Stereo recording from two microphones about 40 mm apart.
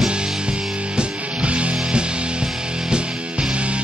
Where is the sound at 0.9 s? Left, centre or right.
Right.